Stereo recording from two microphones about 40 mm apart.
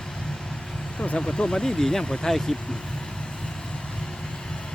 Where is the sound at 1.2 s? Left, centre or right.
Left.